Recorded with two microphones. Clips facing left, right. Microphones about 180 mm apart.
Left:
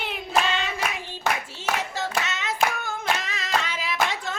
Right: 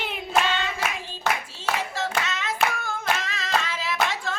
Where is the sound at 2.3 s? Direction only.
20° left (ahead or behind).